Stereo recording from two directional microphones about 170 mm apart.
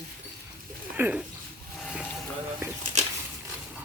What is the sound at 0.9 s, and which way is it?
Speech, 10° right (ahead or behind).